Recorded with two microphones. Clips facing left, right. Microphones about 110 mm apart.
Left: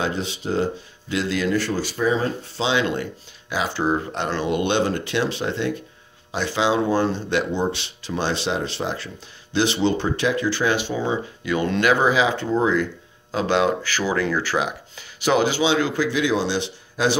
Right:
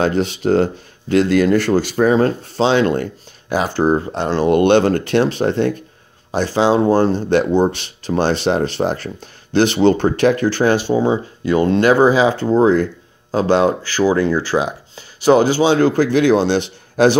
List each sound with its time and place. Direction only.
0.0 s speech: 60° right (ahead or behind); by 4.5 s 35° right (ahead or behind)
4.5 s speech: 55° right (ahead or behind)